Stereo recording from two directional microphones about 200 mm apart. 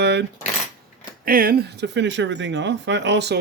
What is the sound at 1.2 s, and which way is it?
Speech, 45° right (ahead or behind).